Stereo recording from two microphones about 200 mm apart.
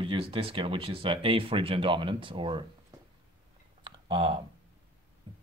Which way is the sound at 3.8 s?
25° right (ahead or behind).